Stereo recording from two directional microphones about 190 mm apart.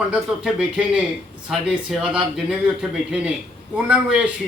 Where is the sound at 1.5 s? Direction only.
5° right (ahead or behind).